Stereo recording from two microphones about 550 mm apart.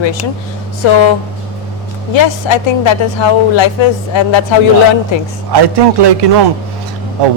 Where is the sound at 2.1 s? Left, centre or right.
Left.